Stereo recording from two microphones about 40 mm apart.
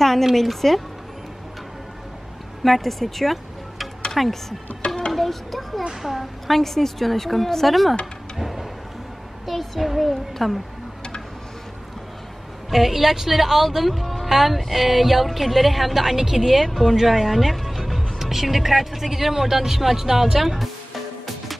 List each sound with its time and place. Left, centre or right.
0.0 s speech: centre
2.6 s speech: centre
5.1 s a sound: centre
6.0 s speech: centre
8.4 s a sound: centre
9.5 s speech: centre
12.7 s speech: centre